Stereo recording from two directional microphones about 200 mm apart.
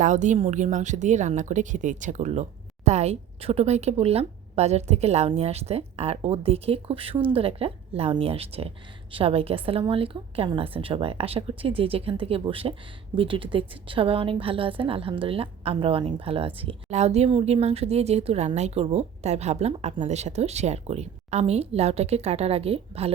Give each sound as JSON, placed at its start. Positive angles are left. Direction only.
{"t": 0.0, "sound": "a woman's voice", "side_deg": -40}